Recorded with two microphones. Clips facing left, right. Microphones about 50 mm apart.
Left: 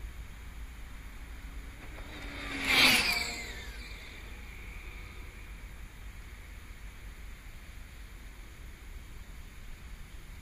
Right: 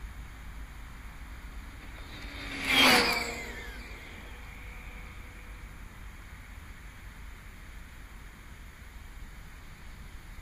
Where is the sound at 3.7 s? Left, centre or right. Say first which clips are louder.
Right 2 dB; right.